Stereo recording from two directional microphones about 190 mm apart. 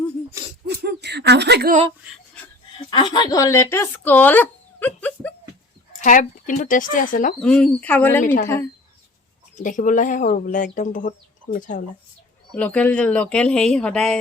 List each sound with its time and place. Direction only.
0.7 s speech: 60° right (ahead or behind)
2.7 s speech: 25° left (ahead or behind)
6.0 s speech: 45° left (ahead or behind)
7.3 s speech: 5° left (ahead or behind)
9.6 s speech: 40° left (ahead or behind)
12.5 s speech: 5° left (ahead or behind)